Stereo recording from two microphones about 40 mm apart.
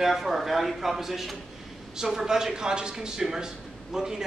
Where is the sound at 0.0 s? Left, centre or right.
Centre.